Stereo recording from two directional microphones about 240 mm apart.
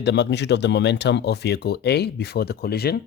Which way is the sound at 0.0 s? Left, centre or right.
Left.